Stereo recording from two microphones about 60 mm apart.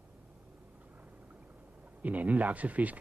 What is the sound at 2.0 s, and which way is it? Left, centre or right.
Speech, right.